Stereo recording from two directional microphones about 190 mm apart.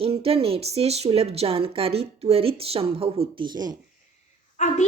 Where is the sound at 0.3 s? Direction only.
30° right (ahead or behind).